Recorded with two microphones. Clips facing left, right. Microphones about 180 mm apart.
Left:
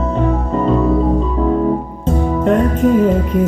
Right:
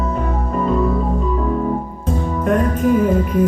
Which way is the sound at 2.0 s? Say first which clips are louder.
Left 5 dB; 25° left (ahead or behind).